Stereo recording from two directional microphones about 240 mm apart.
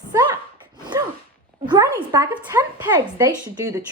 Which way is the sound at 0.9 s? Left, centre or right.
Centre.